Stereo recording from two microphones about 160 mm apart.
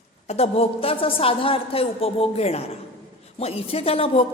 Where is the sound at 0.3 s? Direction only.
40° left (ahead or behind).